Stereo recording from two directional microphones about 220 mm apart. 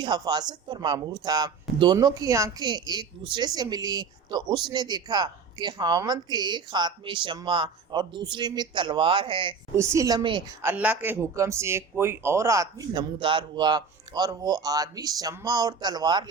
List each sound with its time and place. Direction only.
0.0 s a woman's voice: 20° right (ahead or behind)
10.7 s speech: 10° right (ahead or behind)